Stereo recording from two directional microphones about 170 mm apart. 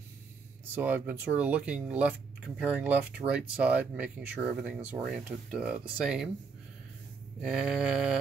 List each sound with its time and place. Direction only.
0.7 s speech: 10° right (ahead or behind)
7.4 s speech: 5° right (ahead or behind)